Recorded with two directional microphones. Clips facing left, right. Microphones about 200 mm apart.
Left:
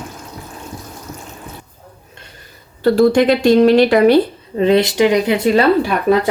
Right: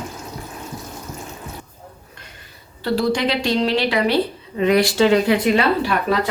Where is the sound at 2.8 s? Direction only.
50° left (ahead or behind).